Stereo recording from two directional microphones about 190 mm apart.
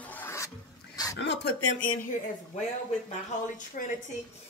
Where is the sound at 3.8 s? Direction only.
45° left (ahead or behind).